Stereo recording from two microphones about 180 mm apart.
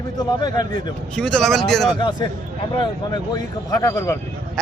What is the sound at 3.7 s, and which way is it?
Speech, 20° left (ahead or behind).